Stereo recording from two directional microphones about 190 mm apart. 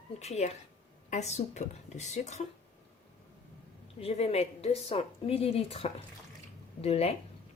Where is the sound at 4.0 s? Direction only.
35° left (ahead or behind).